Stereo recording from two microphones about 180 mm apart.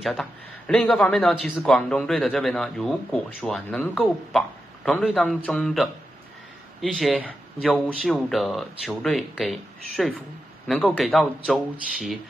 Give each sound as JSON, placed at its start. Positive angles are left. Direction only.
{"t": 0.0, "sound": "a man's voice", "side_deg": 0}